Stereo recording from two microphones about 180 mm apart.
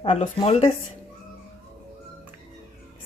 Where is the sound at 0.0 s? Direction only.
35° left (ahead or behind).